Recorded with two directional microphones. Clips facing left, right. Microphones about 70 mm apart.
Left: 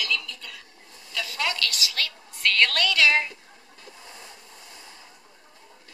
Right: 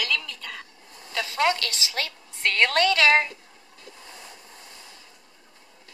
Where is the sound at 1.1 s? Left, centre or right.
Right.